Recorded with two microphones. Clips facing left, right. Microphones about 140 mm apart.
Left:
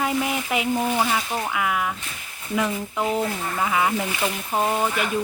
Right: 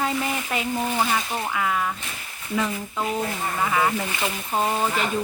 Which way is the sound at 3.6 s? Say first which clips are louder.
Left 1 dB; 5° left (ahead or behind).